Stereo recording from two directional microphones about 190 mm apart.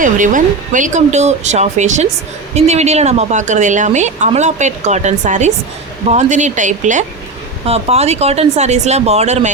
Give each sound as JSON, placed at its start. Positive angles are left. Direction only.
{"t": 0.0, "sound": "a woman's voice", "side_deg": -45}